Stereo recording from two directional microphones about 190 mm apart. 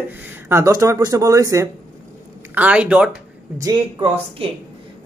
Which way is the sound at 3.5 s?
20° right (ahead or behind).